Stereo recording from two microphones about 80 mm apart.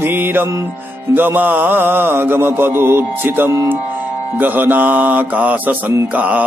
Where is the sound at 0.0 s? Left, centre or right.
Right.